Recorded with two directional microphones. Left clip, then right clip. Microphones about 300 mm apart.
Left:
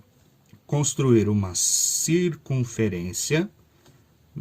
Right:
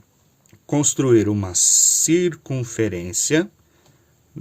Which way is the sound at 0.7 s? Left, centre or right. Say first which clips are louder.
Right 5 dB; right.